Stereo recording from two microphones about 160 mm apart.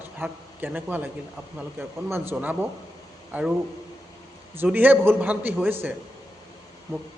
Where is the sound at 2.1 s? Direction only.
15° right (ahead or behind).